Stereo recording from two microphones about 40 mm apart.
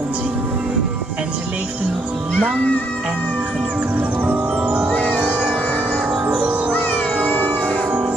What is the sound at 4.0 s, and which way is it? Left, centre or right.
Music, right.